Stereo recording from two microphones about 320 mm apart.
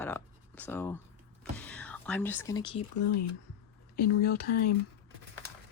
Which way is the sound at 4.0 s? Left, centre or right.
Left.